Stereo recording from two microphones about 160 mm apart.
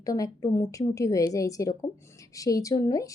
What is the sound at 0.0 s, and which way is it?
Speech, 20° left (ahead or behind).